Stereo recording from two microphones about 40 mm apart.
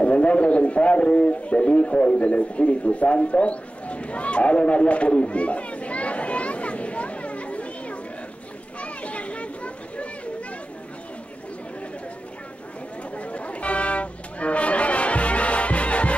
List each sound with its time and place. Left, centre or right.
0.0 s speech: left
8.8 s children playing: left
13.2 s music: left